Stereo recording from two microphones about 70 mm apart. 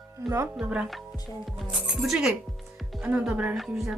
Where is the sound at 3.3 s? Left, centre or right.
Centre.